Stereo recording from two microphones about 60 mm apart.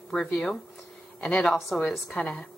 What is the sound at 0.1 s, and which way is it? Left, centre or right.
A woman's voice, centre.